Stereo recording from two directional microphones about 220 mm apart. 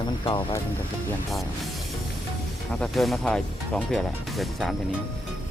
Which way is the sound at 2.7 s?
Centre (ahead or behind).